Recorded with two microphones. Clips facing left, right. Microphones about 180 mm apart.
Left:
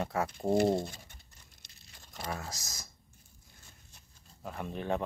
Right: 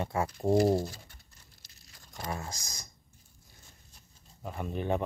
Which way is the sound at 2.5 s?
Centre (ahead or behind).